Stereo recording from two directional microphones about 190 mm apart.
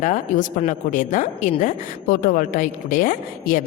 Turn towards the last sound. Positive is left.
turn(degrees=45)  # may be behind; listen again after turning